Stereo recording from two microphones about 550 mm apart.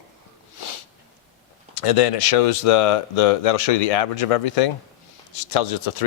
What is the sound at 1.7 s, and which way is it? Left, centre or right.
Speech, left.